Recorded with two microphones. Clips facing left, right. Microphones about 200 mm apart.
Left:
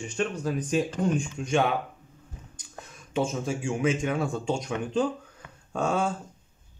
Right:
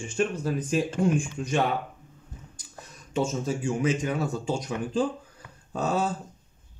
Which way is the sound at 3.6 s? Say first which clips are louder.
Left 1 dB; centre (ahead or behind).